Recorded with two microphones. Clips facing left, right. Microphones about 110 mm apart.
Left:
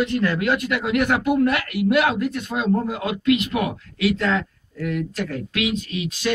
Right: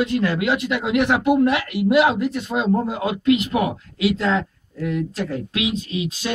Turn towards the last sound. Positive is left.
turn(degrees=-30)  # may be behind; listen again after turning